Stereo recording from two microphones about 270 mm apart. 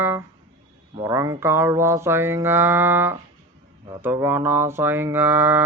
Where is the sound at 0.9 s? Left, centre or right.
Centre.